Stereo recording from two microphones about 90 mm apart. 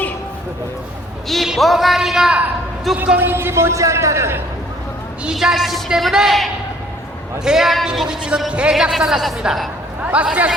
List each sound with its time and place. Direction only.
1.3 s a man's voice: centre (ahead or behind)
3.2 s a man's voice: 25° right (ahead or behind)
5.2 s a woman's voice: 5° right (ahead or behind)
10.0 s a man's voice: 15° right (ahead or behind)